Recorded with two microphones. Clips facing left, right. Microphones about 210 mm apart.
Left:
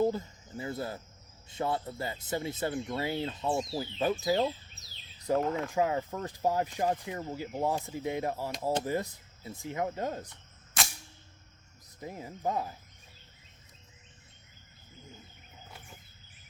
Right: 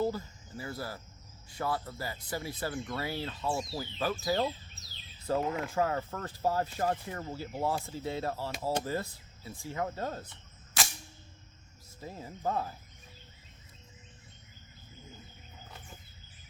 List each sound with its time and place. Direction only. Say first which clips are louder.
0.0 s speech: left 3 dB; 20° left (ahead or behind)
5.4 s speech: left 2 dB; 5° right (ahead or behind)
5.6 s speech: left 2 dB; 15° left (ahead or behind)
10.8 s cap gun: even; centre (ahead or behind)
11.9 s speech: left 2 dB; 15° left (ahead or behind)